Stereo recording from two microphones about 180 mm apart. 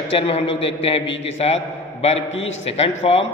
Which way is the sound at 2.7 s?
35° left (ahead or behind).